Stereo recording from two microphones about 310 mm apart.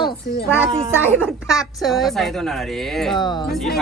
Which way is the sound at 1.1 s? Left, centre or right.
Centre.